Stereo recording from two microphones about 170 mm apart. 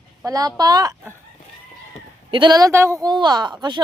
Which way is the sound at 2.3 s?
25° right (ahead or behind).